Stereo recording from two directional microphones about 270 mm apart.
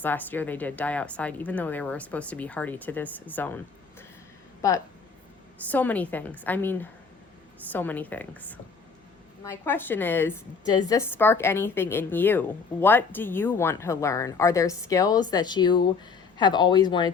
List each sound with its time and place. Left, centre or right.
0.0 s speech: centre
4.6 s a woman's voice: centre